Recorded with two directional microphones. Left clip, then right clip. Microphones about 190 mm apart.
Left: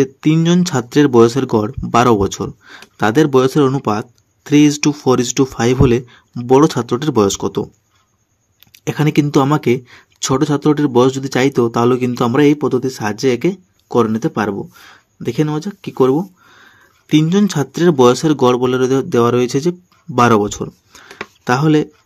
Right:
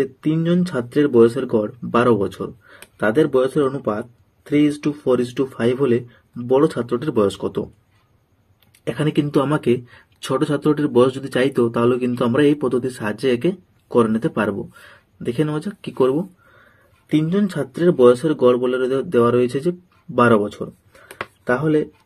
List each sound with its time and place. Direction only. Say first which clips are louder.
0.0 s speech: left 6 dB; 50° left (ahead or behind)
8.8 s speech: left 5 dB; 40° left (ahead or behind)
17.1 s speech: left 6 dB; 50° left (ahead or behind)